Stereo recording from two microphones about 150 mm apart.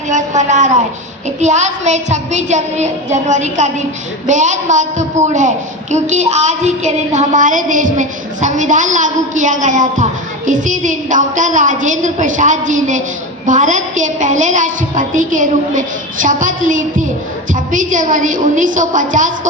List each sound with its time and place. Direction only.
0.1 s a woman's voice: 55° right (ahead or behind)
1.4 s a sound: 50° right (ahead or behind)
4.3 s a woman's voice: 55° right (ahead or behind)